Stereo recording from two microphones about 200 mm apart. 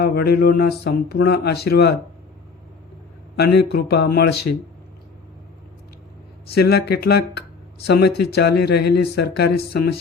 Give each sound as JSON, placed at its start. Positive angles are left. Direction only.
{"t": 0.0, "sound": "speech", "side_deg": 50}
{"t": 3.3, "sound": "speech", "side_deg": 55}
{"t": 6.5, "sound": "speech", "side_deg": 55}